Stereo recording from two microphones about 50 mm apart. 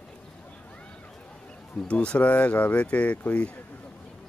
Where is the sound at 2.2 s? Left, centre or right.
Left.